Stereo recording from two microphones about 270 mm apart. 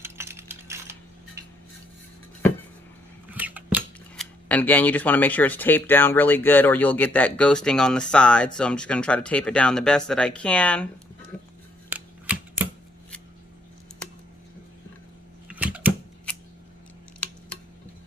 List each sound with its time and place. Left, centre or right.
0.0 s coin: centre
3.2 s scissors: centre
4.4 s speech: centre
11.3 s music: centre
11.9 s a sound: centre
15.4 s typewriter: centre